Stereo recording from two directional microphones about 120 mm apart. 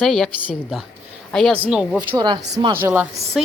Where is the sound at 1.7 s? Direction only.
5° right (ahead or behind).